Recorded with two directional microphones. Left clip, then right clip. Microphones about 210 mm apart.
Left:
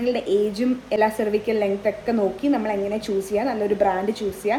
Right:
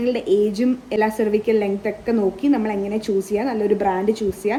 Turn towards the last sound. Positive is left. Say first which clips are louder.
# right 3 dB
turn(degrees=-15)  # may be behind; listen again after turning